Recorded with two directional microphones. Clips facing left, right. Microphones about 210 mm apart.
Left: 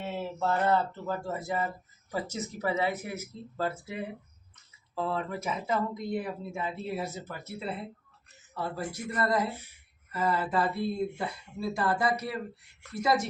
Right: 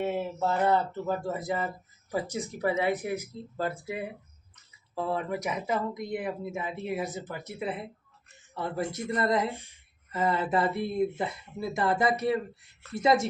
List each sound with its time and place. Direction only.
0.0 s speech: 15° right (ahead or behind)
4.9 s speech: 15° right (ahead or behind)